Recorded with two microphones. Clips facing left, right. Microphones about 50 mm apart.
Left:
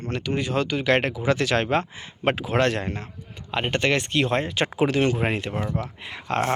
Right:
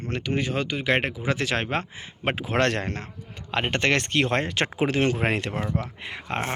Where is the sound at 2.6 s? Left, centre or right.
Right.